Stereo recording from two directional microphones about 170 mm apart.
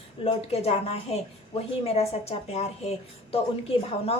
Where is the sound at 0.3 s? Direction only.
35° left (ahead or behind).